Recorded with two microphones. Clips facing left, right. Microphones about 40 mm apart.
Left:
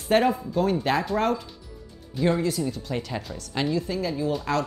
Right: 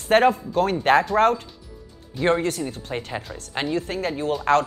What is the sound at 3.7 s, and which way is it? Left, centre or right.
Speech, right.